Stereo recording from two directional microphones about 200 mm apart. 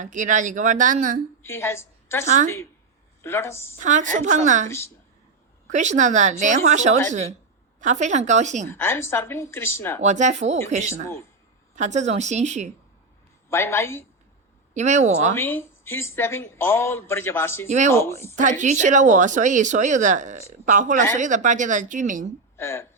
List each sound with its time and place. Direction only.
0.0 s speech: 40° right (ahead or behind)
1.4 s a woman's voice: 10° left (ahead or behind)
2.2 s speech: 35° right (ahead or behind)
3.2 s speech: 10° left (ahead or behind)
3.8 s speech: 40° right (ahead or behind)
8.7 s speech: 10° left (ahead or behind)
10.0 s speech: 35° right (ahead or behind)
13.5 s speech: 10° left (ahead or behind)
14.7 s speech: 35° right (ahead or behind)
15.4 s speech: 10° left (ahead or behind)
17.7 s speech: 35° right (ahead or behind)
17.9 s speech: 10° left (ahead or behind)
18.3 s speech: 40° right (ahead or behind)
22.5 s speech: 10° left (ahead or behind)